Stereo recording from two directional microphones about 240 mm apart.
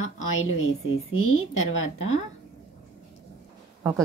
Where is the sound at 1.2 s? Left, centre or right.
Left.